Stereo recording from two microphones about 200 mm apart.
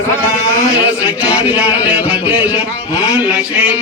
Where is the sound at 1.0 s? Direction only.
5° right (ahead or behind).